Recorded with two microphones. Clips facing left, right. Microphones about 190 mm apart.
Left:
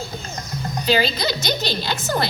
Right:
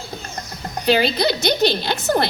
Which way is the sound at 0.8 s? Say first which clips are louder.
Right 3 dB; 60° right (ahead or behind).